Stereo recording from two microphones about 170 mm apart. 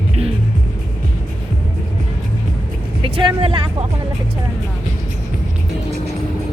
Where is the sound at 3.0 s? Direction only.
30° right (ahead or behind).